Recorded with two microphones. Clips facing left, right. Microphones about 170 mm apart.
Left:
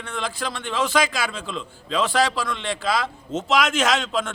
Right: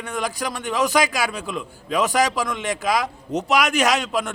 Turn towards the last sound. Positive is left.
turn(degrees=-15)  # may be behind; listen again after turning